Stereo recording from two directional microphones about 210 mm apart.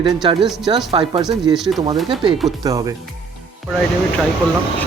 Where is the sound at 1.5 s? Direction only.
Centre (ahead or behind).